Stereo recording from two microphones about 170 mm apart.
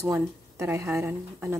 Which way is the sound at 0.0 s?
15° right (ahead or behind).